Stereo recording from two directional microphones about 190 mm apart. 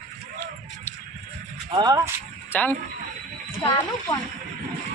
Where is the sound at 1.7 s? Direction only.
20° right (ahead or behind).